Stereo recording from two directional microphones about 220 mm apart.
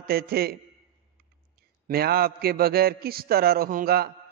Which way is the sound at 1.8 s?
45° right (ahead or behind).